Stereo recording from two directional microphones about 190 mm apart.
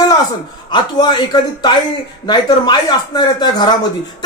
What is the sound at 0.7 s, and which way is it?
Speech, 25° left (ahead or behind).